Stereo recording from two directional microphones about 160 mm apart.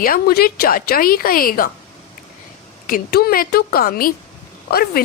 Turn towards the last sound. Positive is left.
turn(degrees=70)  # may be behind; listen again after turning